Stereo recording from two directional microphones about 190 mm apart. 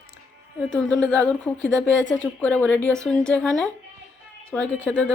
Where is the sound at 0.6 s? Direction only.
Centre (ahead or behind).